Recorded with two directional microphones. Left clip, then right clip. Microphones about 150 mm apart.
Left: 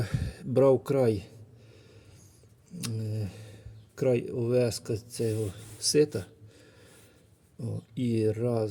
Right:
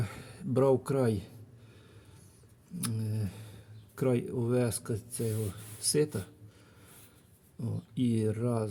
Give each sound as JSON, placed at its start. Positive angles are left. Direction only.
{"t": 0.0, "sound": "speech", "side_deg": 25}
{"t": 2.7, "sound": "a sound", "side_deg": 10}
{"t": 3.9, "sound": "speech", "side_deg": 5}
{"t": 7.6, "sound": "speech", "side_deg": 10}